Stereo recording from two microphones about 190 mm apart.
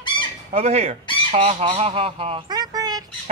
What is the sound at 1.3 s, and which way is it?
Fowl, 30° right (ahead or behind).